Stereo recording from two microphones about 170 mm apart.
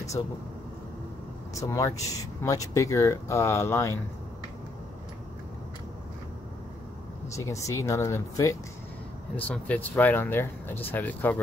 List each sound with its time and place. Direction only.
0.2 s speech: 30° left (ahead or behind)
1.5 s speech: 20° left (ahead or behind)
7.3 s speech: 20° left (ahead or behind)